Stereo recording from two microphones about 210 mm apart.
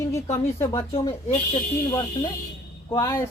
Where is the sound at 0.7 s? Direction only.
30° left (ahead or behind).